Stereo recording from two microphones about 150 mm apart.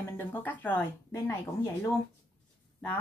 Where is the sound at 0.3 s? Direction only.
10° left (ahead or behind).